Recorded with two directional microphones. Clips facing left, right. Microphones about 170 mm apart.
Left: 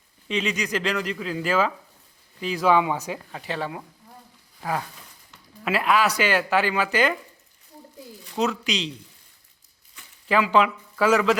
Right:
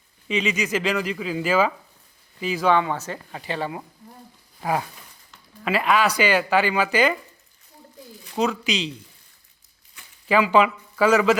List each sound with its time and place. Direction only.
0.3 s speech: 5° right (ahead or behind)
3.3 s speech: centre (ahead or behind)
4.6 s a sound: 15° right (ahead or behind)
5.6 s speech: centre (ahead or behind)
8.4 s speech: centre (ahead or behind)
10.2 s speech: centre (ahead or behind)